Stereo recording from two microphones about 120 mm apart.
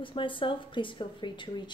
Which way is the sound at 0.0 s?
45° left (ahead or behind).